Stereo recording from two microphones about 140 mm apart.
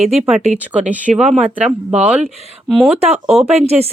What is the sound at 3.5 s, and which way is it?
Speech, 50° right (ahead or behind).